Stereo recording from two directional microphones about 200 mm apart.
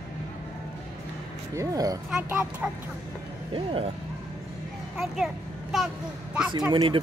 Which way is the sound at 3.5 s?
25° right (ahead or behind).